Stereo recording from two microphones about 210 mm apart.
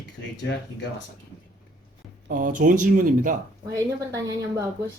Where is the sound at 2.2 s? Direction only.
40° right (ahead or behind).